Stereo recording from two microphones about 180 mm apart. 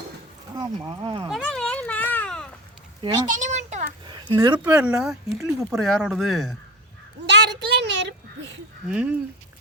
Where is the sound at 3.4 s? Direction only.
40° right (ahead or behind).